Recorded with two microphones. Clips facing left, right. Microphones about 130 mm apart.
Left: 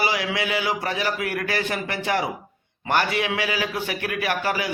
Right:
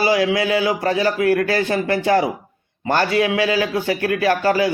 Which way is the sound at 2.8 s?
40° right (ahead or behind).